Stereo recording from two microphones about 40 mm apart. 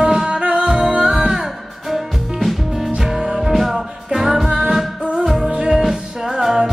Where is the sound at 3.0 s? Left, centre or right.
Centre.